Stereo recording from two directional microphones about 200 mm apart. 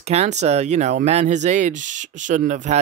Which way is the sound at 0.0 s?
30° right (ahead or behind).